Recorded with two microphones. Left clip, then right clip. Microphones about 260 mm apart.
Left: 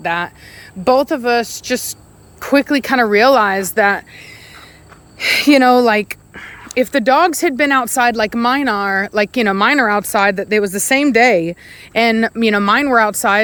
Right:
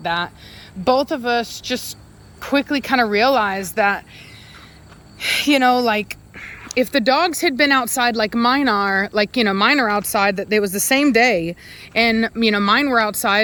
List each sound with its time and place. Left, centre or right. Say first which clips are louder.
0.0 s speech: left 3 dB; centre
5.2 s speech: left 5 dB; centre